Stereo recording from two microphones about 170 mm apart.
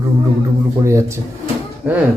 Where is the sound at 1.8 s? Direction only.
15° right (ahead or behind).